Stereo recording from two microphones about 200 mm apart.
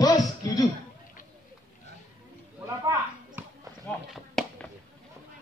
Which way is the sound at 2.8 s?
15° right (ahead or behind).